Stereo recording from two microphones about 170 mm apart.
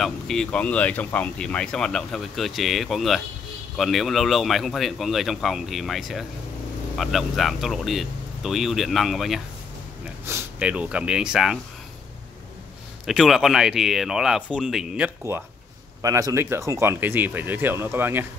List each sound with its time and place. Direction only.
0.0 s speech: 5° left (ahead or behind)
13.0 s speech: centre (ahead or behind)
15.3 s speech: 15° right (ahead or behind)